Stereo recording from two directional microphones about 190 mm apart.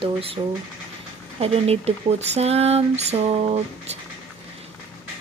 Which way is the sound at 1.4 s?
30° right (ahead or behind).